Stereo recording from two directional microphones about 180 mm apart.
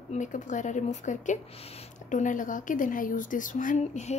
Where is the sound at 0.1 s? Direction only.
45° left (ahead or behind).